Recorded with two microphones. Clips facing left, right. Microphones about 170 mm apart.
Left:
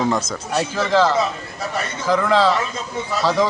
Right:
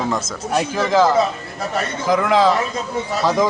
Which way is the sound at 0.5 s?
15° right (ahead or behind).